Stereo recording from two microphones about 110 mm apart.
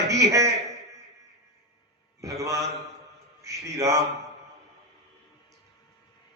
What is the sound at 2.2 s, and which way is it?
A man's voice, 30° right (ahead or behind).